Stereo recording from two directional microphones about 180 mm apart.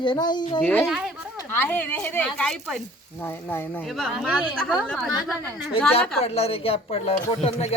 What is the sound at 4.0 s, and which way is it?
Speech, centre (ahead or behind).